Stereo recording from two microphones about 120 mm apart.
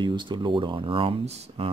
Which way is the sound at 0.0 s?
40° right (ahead or behind).